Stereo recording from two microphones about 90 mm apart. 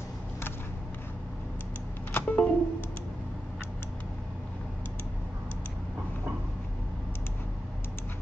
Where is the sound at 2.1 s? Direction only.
20° left (ahead or behind).